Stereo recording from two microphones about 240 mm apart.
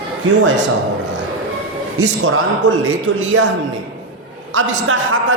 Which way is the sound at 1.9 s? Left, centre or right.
Right.